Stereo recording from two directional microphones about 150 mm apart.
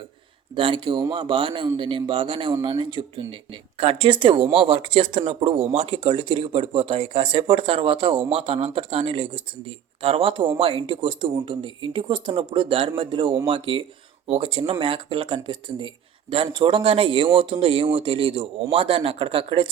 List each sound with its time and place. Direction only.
0.5 s a man's voice: 35° right (ahead or behind)